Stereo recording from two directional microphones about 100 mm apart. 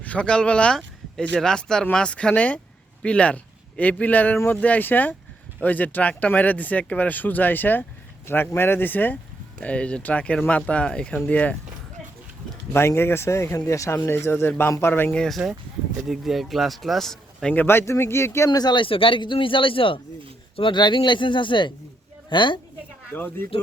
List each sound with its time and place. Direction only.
0.0 s a man's voice: 10° left (ahead or behind)
12.7 s speech: 25° left (ahead or behind)
15.1 s speech: 5° left (ahead or behind)
17.5 s speech: 20° left (ahead or behind)
18.5 s a man's voice: 45° left (ahead or behind); by 20.0 s 60° left (ahead or behind)
20.6 s speech: 50° left (ahead or behind)
23.1 s speech: 20° left (ahead or behind)